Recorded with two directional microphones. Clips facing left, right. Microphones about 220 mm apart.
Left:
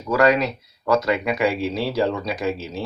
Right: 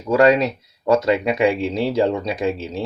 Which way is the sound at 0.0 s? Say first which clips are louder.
Right 3 dB; 25° right (ahead or behind).